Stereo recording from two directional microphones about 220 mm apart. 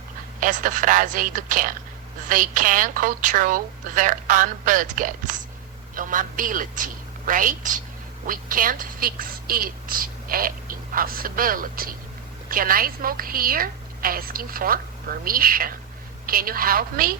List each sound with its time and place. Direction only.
0.3 s a woman's voice: 35° right (ahead or behind)